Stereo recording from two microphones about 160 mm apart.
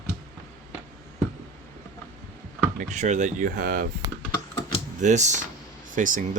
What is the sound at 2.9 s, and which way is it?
Speech, 45° right (ahead or behind).